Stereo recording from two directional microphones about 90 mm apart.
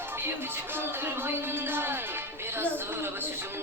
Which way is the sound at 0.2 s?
25° right (ahead or behind).